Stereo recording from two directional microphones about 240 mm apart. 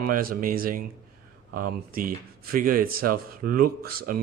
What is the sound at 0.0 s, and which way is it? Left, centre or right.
Speech, right.